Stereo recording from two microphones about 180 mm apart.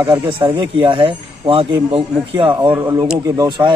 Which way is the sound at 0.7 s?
30° right (ahead or behind).